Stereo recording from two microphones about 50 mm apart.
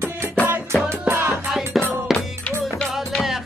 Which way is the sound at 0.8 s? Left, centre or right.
Right.